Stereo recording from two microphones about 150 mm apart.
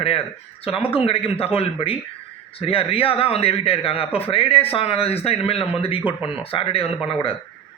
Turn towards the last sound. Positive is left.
turn(degrees=40)  # may be behind; listen again after turning